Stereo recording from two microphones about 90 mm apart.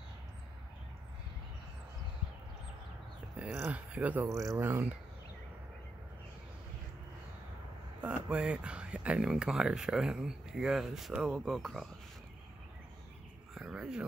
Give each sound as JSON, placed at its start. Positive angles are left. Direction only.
{"t": 3.4, "sound": "speech", "side_deg": -15}
{"t": 4.3, "sound": "speech", "side_deg": -40}
{"t": 4.6, "sound": "speech", "side_deg": -25}
{"t": 8.0, "sound": "speech", "side_deg": -15}
{"t": 13.6, "sound": "speech", "side_deg": -5}